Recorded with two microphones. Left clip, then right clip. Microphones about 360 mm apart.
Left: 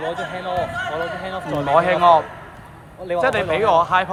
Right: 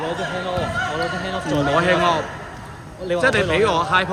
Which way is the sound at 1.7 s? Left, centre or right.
Centre.